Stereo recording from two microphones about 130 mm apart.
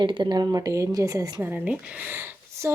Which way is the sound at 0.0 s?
35° right (ahead or behind).